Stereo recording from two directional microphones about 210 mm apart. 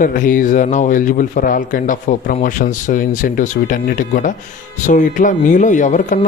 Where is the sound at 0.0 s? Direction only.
40° left (ahead or behind).